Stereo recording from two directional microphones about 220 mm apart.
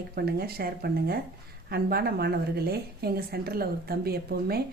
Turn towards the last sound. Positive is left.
turn(degrees=-45)  # may be behind; listen again after turning